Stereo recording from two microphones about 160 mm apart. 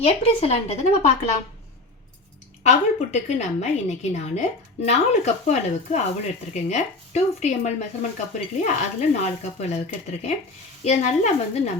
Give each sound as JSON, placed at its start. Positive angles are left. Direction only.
{"t": 0.0, "sound": "speech", "side_deg": 40}
{"t": 2.6, "sound": "a woman's voice", "side_deg": 45}